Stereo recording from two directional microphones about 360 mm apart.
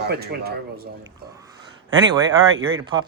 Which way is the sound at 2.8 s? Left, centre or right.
Centre.